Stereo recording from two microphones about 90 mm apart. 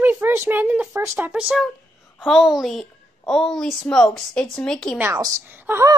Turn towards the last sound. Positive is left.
turn(degrees=-20)  # may be behind; listen again after turning